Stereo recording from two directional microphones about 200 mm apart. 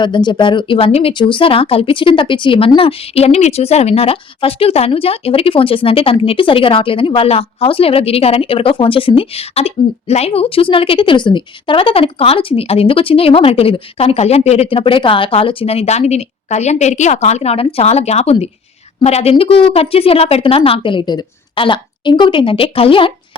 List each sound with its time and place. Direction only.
0.0 s speech: 20° left (ahead or behind)